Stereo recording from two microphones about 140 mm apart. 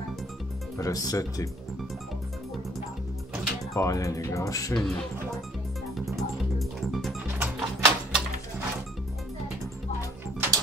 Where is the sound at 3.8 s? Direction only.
25° left (ahead or behind).